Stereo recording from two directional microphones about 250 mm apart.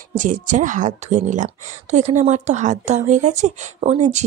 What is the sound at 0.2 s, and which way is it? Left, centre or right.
Speech, right.